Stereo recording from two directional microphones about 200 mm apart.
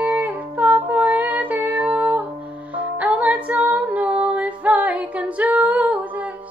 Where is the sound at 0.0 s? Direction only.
10° right (ahead or behind).